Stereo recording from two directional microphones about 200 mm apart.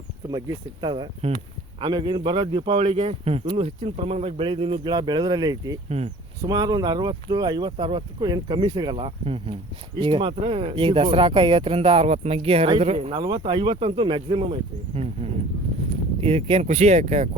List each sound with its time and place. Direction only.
0.3 s speech: 20° right (ahead or behind)